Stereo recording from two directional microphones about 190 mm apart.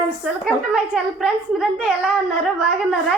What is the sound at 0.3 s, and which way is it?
A woman's voice, 5° right (ahead or behind).